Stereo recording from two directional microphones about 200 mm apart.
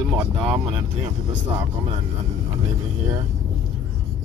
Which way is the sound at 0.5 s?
25° right (ahead or behind).